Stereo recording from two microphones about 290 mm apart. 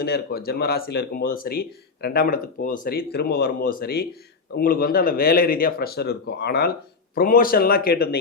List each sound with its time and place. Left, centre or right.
0.0 s speech: left